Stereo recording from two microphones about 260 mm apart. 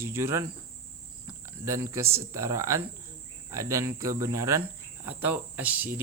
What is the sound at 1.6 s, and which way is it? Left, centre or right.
Speech, centre.